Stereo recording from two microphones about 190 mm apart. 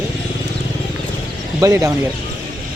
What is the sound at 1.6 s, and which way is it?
Speech, 20° right (ahead or behind).